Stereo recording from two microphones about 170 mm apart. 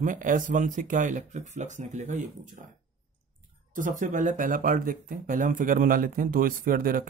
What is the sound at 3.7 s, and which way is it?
Speech, 50° right (ahead or behind).